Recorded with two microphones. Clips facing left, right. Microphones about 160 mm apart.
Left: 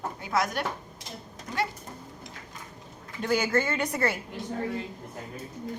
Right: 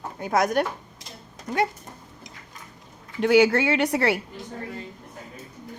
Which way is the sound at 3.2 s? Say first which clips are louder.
Right 8 dB; 75° right (ahead or behind).